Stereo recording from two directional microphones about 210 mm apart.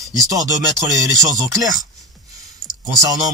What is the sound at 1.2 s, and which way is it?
Speech, 15° right (ahead or behind).